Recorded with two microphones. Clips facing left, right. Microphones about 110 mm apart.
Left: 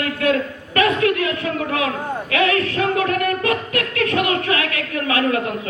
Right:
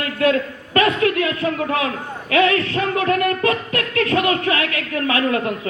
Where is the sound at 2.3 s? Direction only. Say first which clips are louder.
Right 3 dB; 30° right (ahead or behind).